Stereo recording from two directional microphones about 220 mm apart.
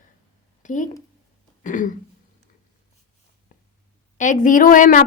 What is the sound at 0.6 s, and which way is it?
A woman's voice, 35° left (ahead or behind).